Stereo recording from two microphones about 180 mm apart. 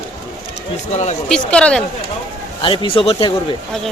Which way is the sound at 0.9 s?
40° left (ahead or behind).